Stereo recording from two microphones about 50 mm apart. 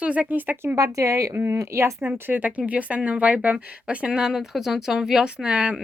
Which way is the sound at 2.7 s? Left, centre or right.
Right.